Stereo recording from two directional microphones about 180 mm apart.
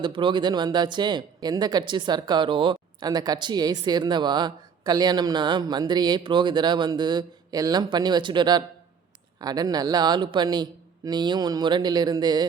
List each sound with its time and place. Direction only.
0.0 s speech: 25° right (ahead or behind)